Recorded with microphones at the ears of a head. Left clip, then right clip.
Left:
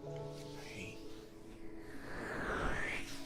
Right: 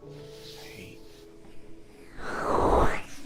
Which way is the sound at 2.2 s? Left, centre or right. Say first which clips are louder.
Right 14 dB; right.